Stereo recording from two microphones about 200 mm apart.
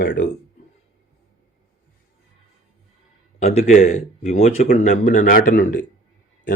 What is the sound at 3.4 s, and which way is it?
Speech, 35° left (ahead or behind).